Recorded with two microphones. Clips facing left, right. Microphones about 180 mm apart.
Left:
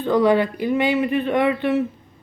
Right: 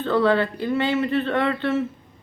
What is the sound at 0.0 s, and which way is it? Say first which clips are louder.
Speech: left 3 dB; 15° left (ahead or behind).